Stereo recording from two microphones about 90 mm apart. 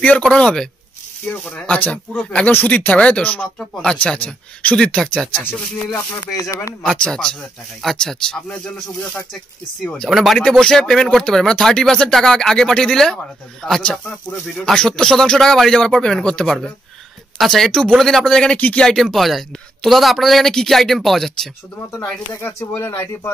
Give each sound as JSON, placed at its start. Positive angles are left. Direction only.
{"t": 0.2, "sound": "speech", "side_deg": 10}
{"t": 5.3, "sound": "speech", "side_deg": 20}
{"t": 6.4, "sound": "speech", "side_deg": 35}
{"t": 6.8, "sound": "speech", "side_deg": 5}
{"t": 10.0, "sound": "a man's voice", "side_deg": 0}
{"t": 18.9, "sound": "a man's voice", "side_deg": 0}
{"t": 21.9, "sound": "speech", "side_deg": 30}